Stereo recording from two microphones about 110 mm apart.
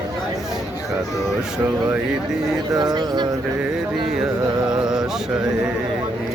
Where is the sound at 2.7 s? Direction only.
40° right (ahead or behind).